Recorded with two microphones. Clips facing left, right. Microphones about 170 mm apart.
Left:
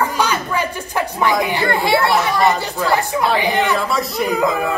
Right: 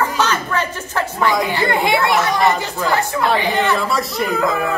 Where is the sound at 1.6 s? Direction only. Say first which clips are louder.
Even; 20° right (ahead or behind).